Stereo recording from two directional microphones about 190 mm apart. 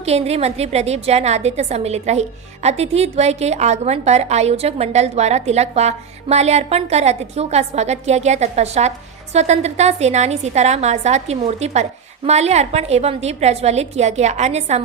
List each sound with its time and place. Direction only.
0.0 s a woman's voice: 35° right (ahead or behind)